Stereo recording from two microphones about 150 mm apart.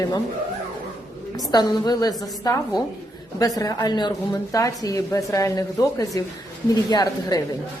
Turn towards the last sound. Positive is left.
turn(degrees=25)  # may be behind; listen again after turning